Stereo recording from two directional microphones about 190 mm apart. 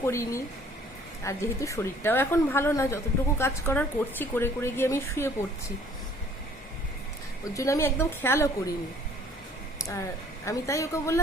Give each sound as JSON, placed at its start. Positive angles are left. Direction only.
{"t": 0.0, "sound": "a woman's voice", "side_deg": 15}
{"t": 7.5, "sound": "a woman's voice", "side_deg": 15}
{"t": 9.7, "sound": "a sound", "side_deg": 15}
{"t": 10.4, "sound": "a woman's voice", "side_deg": 15}